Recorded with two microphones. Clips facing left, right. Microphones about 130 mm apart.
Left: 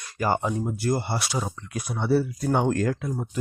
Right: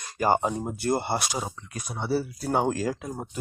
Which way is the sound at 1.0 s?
50° right (ahead or behind).